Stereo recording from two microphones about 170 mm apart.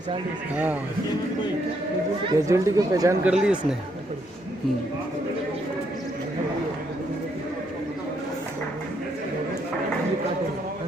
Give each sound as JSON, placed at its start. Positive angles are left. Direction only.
{"t": 0.5, "sound": "speech", "side_deg": -10}
{"t": 2.5, "sound": "speech", "side_deg": -20}
{"t": 3.2, "sound": "speech", "side_deg": -5}